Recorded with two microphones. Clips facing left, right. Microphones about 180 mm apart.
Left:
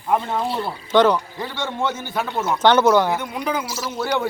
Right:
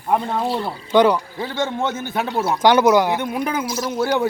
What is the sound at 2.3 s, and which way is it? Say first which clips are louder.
Speech: right 3 dB; 35° right (ahead or behind).